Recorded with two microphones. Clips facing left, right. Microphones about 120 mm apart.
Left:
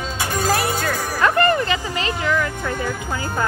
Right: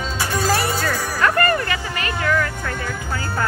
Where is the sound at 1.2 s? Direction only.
20° left (ahead or behind).